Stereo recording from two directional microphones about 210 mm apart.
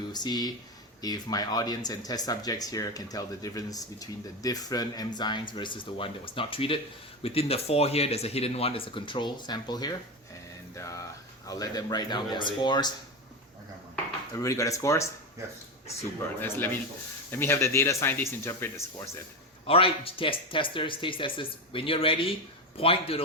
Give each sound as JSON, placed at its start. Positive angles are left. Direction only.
{"t": 0.1, "sound": "speech", "side_deg": 20}
{"t": 13.9, "sound": "speech", "side_deg": 15}
{"t": 16.4, "sound": "speech", "side_deg": 10}
{"t": 19.6, "sound": "speech", "side_deg": 25}